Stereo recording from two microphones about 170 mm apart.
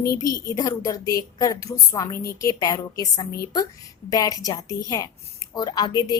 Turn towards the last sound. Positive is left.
turn(degrees=25)  # may be behind; listen again after turning